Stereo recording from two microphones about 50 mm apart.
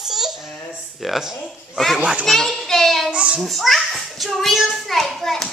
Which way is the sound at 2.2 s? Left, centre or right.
Centre.